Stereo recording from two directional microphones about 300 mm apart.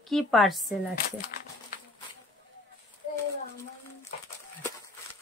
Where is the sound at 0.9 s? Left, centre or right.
Left.